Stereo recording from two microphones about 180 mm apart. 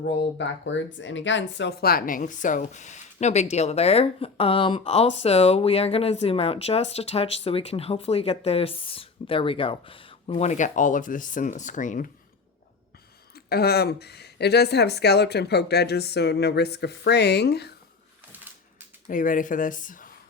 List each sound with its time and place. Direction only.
0.0 s speech: 75° left (ahead or behind); by 12.0 s 45° left (ahead or behind)
13.3 s a woman's voice: 60° left (ahead or behind)
19.0 s speech: 45° left (ahead or behind)